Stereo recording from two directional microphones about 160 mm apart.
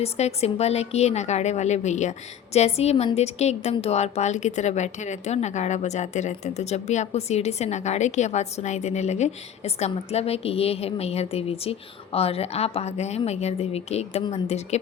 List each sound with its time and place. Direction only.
0.0 s a woman's voice: 40° left (ahead or behind)